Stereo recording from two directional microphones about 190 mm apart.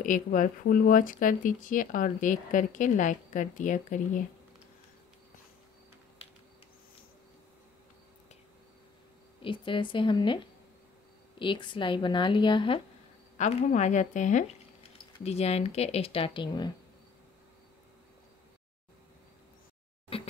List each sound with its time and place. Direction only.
0.0 s speech: 45° left (ahead or behind)
9.4 s speech: 25° left (ahead or behind)
20.1 s a sound: 30° left (ahead or behind)